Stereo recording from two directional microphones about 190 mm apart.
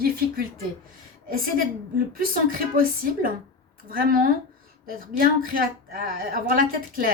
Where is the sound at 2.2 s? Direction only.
50° right (ahead or behind).